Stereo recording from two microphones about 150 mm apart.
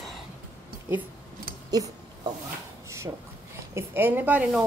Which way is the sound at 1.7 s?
25° right (ahead or behind).